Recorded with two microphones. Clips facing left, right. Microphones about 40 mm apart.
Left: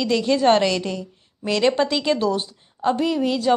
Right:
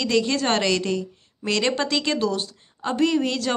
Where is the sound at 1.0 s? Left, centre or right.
Left.